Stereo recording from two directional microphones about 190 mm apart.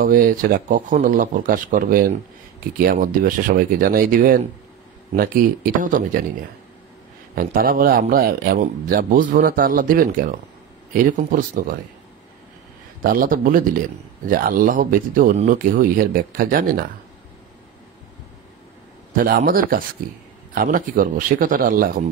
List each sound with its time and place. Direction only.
0.0 s speech: 45° right (ahead or behind)
7.3 s speech: 50° right (ahead or behind)
13.0 s speech: 50° right (ahead or behind)
19.1 s speech: 50° right (ahead or behind)